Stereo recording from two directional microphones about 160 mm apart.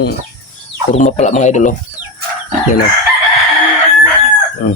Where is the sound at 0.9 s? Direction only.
50° left (ahead or behind).